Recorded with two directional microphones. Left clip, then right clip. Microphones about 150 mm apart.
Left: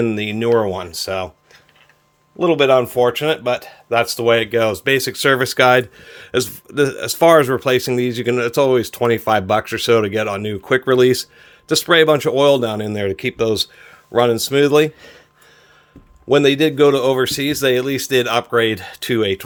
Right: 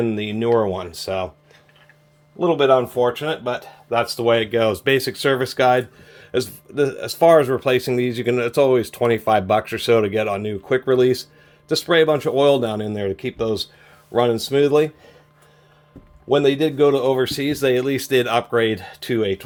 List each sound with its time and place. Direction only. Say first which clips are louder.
0.0 s speech: left 3 dB; 45° left (ahead or behind)
2.4 s speech: left 2 dB; 80° left; by 5.1 s 25° left (ahead or behind)
5.1 s speech: left 4 dB; 50° left (ahead or behind)
7.6 s speech: left 2 dB; 35° left (ahead or behind); by 12.3 s 60° left (ahead or behind)
12.3 s speech: left 3 dB; 40° left (ahead or behind)
12.9 s speech: left 4 dB; 60° left (ahead or behind)
14.1 s speech: left 3 dB; 45° left (ahead or behind); by 15.1 s 60° left (ahead or behind)
16.3 s speech: left 4 dB; 65° left (ahead or behind)